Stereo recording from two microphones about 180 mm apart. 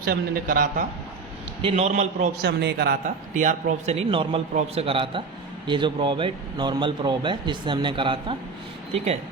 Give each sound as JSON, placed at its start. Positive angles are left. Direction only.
{"t": 0.0, "sound": "a man's voice", "side_deg": -55}
{"t": 1.6, "sound": "a man's voice", "side_deg": -35}
{"t": 2.4, "sound": "speech", "side_deg": -65}
{"t": 3.3, "sound": "a man's voice", "side_deg": -45}